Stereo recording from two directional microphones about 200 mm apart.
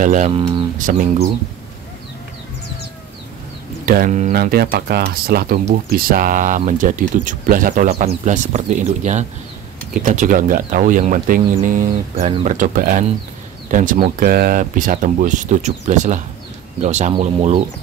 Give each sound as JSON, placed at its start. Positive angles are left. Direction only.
{"t": 0.0, "sound": "speech", "side_deg": -40}
{"t": 0.3, "sound": "speech", "side_deg": -25}
{"t": 0.7, "sound": "speech", "side_deg": -40}
{"t": 3.8, "sound": "speech", "side_deg": -45}